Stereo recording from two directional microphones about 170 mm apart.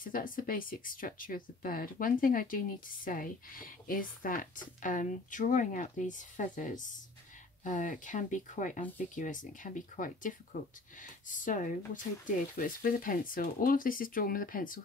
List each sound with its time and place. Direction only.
0.0 s speech: 55° left (ahead or behind)